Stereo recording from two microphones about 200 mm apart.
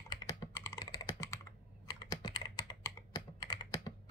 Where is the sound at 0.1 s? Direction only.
20° left (ahead or behind).